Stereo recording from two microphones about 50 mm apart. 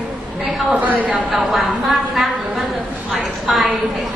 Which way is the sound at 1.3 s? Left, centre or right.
Centre.